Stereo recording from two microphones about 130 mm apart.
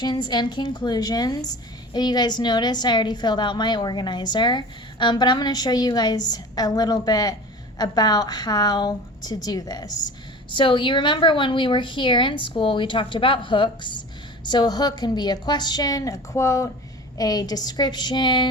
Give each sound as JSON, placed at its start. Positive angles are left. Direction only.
{"t": 0.0, "sound": "a woman's voice", "side_deg": 35}